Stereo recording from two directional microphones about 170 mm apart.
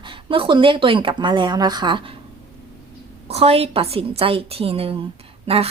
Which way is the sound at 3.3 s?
35° right (ahead or behind).